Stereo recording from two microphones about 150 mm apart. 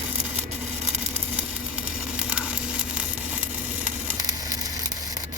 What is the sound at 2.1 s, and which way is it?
Sizzle, 5° right (ahead or behind).